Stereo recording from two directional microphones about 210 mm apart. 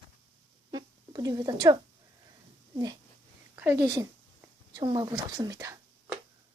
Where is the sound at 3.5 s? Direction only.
10° right (ahead or behind).